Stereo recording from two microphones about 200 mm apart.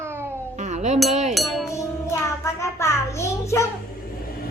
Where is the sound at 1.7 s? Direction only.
15° left (ahead or behind).